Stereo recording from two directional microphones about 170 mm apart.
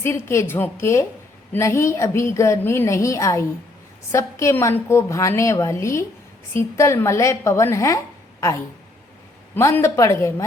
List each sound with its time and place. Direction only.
0.0 s a woman's voice: 15° left (ahead or behind)